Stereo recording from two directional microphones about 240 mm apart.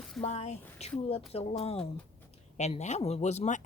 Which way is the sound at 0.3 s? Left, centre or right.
Left.